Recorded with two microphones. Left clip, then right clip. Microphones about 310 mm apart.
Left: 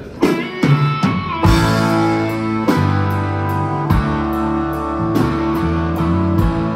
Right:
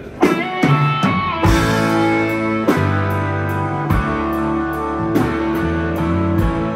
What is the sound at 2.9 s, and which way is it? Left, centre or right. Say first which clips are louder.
Music: even; left.